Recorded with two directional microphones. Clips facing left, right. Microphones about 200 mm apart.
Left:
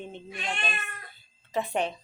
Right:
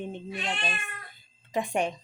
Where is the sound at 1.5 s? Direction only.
15° right (ahead or behind).